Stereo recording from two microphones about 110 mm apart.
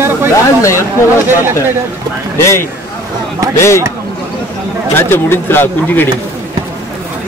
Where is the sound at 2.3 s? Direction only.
25° left (ahead or behind).